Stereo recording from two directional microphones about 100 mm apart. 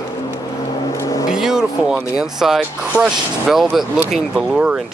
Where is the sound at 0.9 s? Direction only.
30° left (ahead or behind).